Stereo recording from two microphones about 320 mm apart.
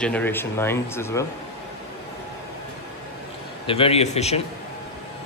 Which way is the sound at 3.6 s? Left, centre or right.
Centre.